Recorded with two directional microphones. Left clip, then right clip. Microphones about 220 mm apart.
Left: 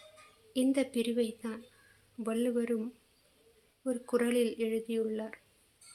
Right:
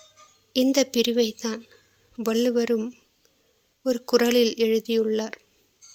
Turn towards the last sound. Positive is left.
turn(degrees=-40)  # may be behind; listen again after turning